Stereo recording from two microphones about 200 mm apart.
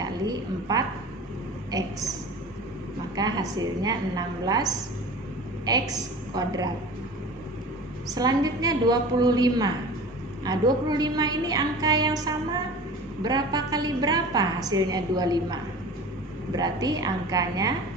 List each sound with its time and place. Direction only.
0.0 s a woman's voice: 20° right (ahead or behind)
3.2 s a woman's voice: 20° right (ahead or behind)
5.7 s a woman's voice: 20° right (ahead or behind)
8.1 s a woman's voice: 20° right (ahead or behind)